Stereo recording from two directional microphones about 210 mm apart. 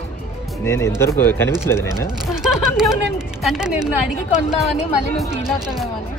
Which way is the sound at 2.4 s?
Centre (ahead or behind).